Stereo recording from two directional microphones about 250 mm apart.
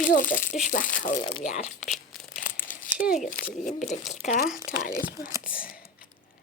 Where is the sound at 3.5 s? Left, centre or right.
Left.